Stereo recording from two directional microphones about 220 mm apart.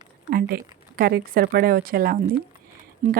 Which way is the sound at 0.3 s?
40° right (ahead or behind).